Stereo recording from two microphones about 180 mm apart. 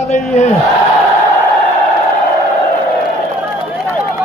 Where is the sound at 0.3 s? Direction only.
40° left (ahead or behind).